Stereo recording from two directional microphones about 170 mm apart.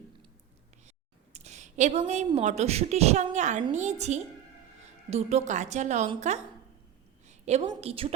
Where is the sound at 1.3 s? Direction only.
40° right (ahead or behind).